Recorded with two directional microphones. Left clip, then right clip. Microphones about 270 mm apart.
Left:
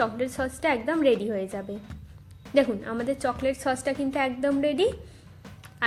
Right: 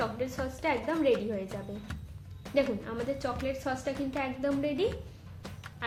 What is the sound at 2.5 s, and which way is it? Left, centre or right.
A woman's voice, left.